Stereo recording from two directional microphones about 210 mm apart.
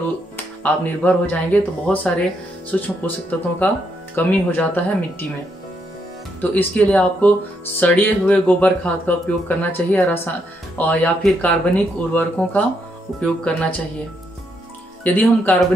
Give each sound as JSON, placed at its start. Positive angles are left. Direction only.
{"t": 0.7, "sound": "speech", "side_deg": 10}
{"t": 6.4, "sound": "speech", "side_deg": 10}
{"t": 15.0, "sound": "speech", "side_deg": 10}